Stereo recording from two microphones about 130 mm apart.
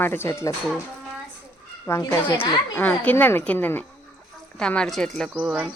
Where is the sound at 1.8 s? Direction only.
20° left (ahead or behind); by 5.3 s 5° left (ahead or behind).